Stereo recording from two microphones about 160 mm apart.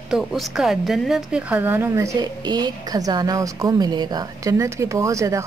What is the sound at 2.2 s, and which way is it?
A woman's voice, 25° right (ahead or behind).